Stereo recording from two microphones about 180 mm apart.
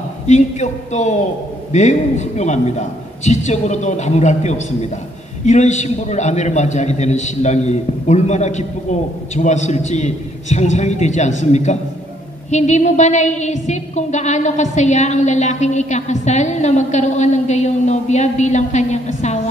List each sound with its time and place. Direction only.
0.3 s a woman's voice: 40° left (ahead or behind)